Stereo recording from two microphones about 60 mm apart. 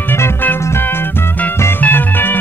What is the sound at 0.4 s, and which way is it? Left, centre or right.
Music, left.